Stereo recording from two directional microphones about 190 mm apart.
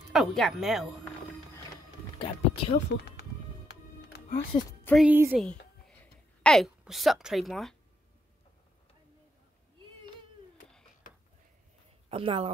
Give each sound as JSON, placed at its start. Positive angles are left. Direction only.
{"t": 0.1, "sound": "a woman's voice", "side_deg": 0}
{"t": 2.1, "sound": "a sound", "side_deg": 30}
{"t": 2.7, "sound": "music", "side_deg": 60}
{"t": 4.5, "sound": "a woman's voice", "side_deg": 20}
{"t": 5.0, "sound": "speech", "side_deg": -10}
{"t": 6.4, "sound": "a woman's voice", "side_deg": 0}
{"t": 12.1, "sound": "speech", "side_deg": -30}